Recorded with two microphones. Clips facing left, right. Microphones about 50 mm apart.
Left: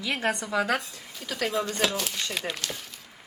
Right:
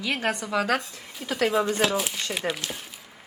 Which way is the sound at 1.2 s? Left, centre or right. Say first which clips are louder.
Right 5 dB; centre.